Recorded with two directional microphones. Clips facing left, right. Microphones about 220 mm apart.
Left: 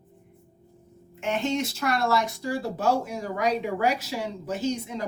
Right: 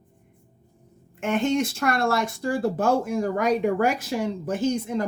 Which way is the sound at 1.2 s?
50° right (ahead or behind).